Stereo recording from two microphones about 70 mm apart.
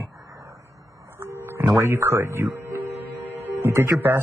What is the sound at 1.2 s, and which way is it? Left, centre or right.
Music, right.